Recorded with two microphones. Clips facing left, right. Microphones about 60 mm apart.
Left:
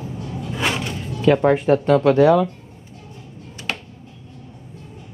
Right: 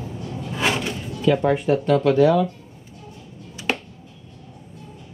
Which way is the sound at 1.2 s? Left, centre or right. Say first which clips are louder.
Left 3 dB; left.